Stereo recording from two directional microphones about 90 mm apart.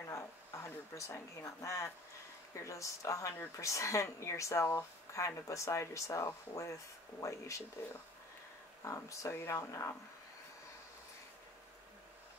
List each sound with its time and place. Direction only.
0.1 s speech: 35° left (ahead or behind)
8.8 s speech: 35° left (ahead or behind)